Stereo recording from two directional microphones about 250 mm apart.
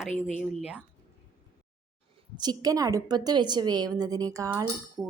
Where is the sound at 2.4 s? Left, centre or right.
Centre.